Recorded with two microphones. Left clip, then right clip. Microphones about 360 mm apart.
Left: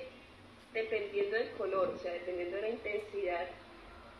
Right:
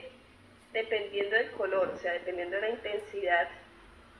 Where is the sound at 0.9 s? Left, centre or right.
Right.